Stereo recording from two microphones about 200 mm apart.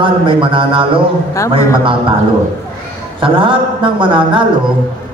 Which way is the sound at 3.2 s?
25° right (ahead or behind).